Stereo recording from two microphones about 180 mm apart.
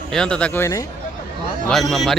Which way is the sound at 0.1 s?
5° left (ahead or behind).